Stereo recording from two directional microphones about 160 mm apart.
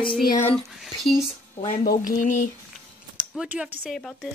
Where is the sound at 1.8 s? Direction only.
60° left (ahead or behind).